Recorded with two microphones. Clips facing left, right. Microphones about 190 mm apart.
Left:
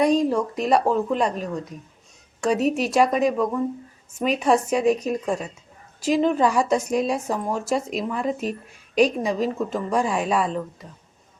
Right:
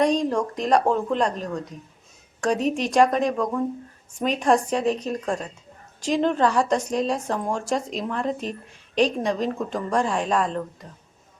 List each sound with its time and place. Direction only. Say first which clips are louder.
0.0 s a woman's voice: left 2 dB; 5° left (ahead or behind)